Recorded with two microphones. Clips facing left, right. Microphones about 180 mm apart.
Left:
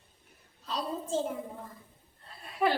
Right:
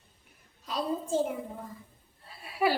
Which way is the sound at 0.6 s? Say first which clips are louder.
Right 3 dB; 10° right (ahead or behind).